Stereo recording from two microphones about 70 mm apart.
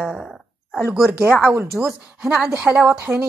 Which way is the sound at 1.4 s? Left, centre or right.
Right.